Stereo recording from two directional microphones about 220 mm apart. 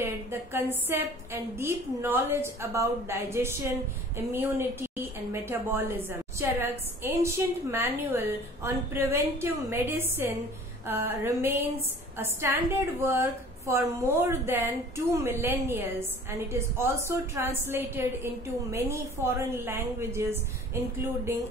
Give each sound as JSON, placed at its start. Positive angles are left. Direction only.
{"t": 0.0, "sound": "a woman's voice", "side_deg": -10}